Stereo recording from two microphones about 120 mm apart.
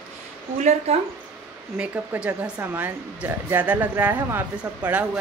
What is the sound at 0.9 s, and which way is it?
Speech, 55° right (ahead or behind).